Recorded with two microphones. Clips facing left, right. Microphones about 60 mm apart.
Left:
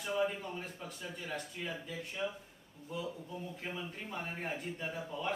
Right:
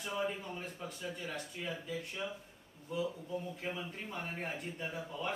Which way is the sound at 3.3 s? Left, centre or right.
Centre.